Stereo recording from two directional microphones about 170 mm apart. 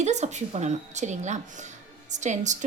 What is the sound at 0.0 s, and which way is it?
Speech, 45° right (ahead or behind).